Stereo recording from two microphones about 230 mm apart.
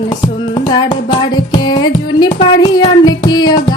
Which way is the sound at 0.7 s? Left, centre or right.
Centre.